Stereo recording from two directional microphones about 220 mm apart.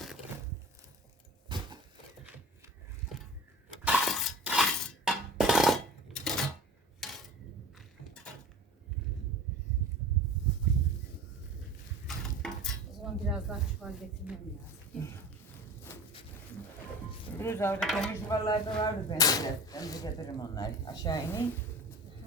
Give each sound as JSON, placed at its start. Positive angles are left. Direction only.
{"t": 1.5, "sound": "a sound", "side_deg": -20}
{"t": 3.8, "sound": "breaking", "side_deg": 0}
{"t": 7.0, "sound": "a sound", "side_deg": 0}
{"t": 7.8, "sound": "clip-clop", "side_deg": 5}
{"t": 12.0, "sound": "dishes", "side_deg": 0}
{"t": 17.3, "sound": "speech", "side_deg": 10}
{"t": 17.7, "sound": "speech", "side_deg": 0}
{"t": 18.1, "sound": "speech", "side_deg": 15}